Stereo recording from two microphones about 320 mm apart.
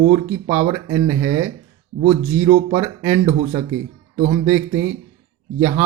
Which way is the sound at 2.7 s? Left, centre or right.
Centre.